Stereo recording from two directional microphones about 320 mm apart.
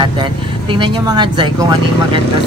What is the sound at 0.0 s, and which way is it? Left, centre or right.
Speech, centre.